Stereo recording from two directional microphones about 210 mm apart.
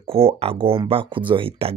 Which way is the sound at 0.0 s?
25° right (ahead or behind).